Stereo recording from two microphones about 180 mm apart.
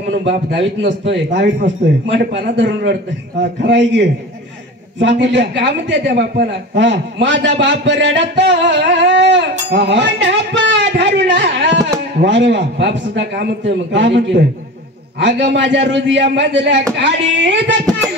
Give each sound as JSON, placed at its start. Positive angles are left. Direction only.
{"t": 0.5, "sound": "a man's voice", "side_deg": -80}